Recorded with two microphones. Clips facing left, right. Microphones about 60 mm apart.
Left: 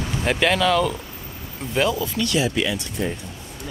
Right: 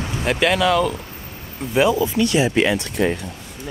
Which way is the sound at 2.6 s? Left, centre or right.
Right.